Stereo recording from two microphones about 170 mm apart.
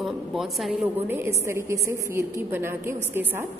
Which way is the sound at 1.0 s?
15° right (ahead or behind).